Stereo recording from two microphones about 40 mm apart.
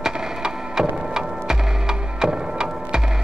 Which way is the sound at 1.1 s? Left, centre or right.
Centre.